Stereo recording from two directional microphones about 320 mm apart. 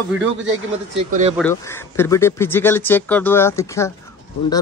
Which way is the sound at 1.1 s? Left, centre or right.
Right.